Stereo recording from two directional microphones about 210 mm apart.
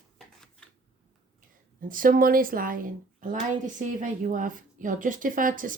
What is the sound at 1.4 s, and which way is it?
A woman's voice, 40° right (ahead or behind).